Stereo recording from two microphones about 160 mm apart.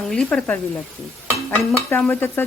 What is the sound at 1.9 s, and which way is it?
Speech, 10° left (ahead or behind).